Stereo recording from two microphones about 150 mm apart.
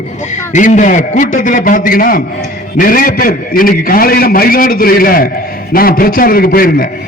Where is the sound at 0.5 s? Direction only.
55° left (ahead or behind).